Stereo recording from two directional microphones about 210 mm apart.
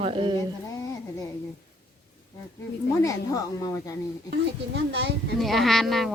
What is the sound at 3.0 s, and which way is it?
Speech, 15° left (ahead or behind).